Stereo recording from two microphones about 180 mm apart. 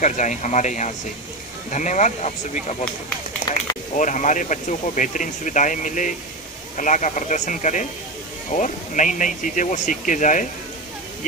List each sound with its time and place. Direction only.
0.0 s speech: 45° left (ahead or behind)
3.9 s speech: 45° left (ahead or behind)